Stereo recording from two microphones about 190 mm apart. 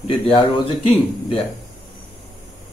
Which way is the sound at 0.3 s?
30° left (ahead or behind).